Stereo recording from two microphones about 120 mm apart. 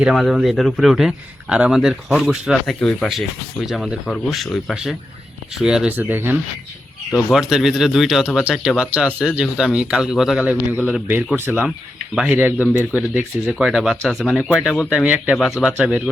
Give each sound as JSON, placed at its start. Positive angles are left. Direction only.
{"t": 0.0, "sound": "speech", "side_deg": 0}
{"t": 5.9, "sound": "speech", "side_deg": -15}
{"t": 7.3, "sound": "speech", "side_deg": -5}
{"t": 14.3, "sound": "speech", "side_deg": 15}
{"t": 14.8, "sound": "speech", "side_deg": -10}